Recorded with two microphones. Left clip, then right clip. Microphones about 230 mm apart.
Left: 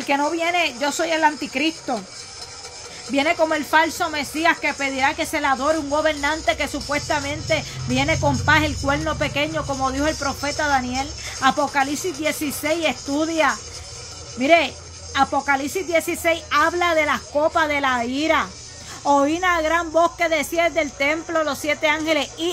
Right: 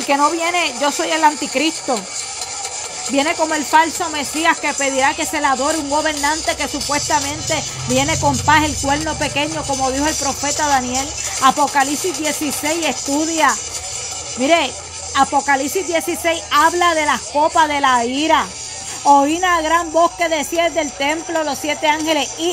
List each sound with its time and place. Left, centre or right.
0.1 s speech: centre
3.2 s speech: centre